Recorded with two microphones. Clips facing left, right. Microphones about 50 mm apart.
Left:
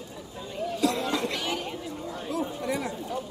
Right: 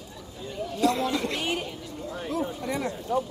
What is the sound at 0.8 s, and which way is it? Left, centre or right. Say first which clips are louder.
Chatter: right 3 dB; centre.